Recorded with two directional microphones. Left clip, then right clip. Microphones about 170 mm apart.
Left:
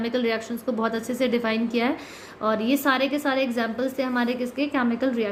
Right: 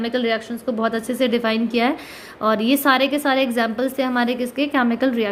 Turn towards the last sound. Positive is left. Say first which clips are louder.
# right 5 dB
turn(degrees=-30)  # may be behind; listen again after turning